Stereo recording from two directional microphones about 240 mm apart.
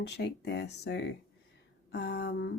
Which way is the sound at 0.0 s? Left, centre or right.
Left.